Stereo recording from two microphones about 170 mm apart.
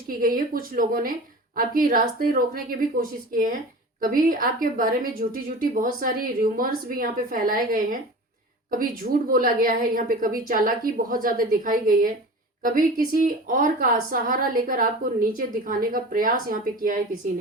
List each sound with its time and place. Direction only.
0.1 s a woman's voice: 55° right (ahead or behind)
13.2 s a woman's voice: 55° right (ahead or behind)